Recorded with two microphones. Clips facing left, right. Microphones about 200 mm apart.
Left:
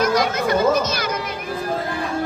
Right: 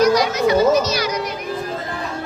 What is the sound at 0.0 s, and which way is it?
Children playing, 55° left (ahead or behind).